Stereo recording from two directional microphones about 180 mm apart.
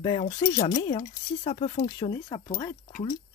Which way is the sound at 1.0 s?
45° left (ahead or behind).